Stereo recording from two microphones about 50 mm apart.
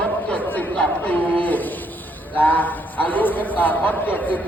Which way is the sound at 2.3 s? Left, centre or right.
Left.